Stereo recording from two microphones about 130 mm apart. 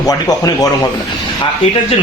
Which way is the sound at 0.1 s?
30° left (ahead or behind).